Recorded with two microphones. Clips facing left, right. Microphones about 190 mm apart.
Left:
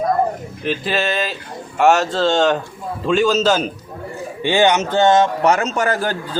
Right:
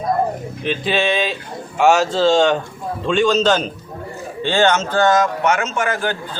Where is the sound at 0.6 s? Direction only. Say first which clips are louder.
Right 1 dB; centre (ahead or behind).